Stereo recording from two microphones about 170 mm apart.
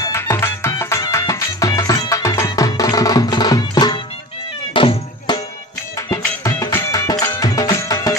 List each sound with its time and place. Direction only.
0.0 s music: 15° left (ahead or behind)
4.7 s cat: 30° left (ahead or behind)
6.0 s music: 15° left (ahead or behind)